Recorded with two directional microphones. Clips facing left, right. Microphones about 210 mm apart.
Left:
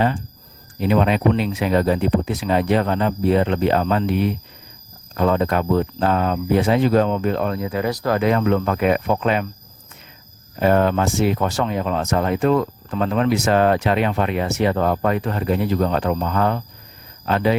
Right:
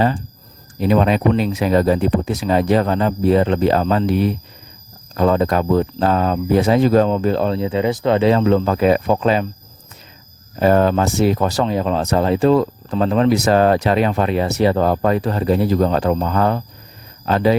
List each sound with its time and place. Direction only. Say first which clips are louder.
0.8 s speech: right 2 dB; 40° right (ahead or behind)
10.6 s speech: right 3 dB; 35° right (ahead or behind)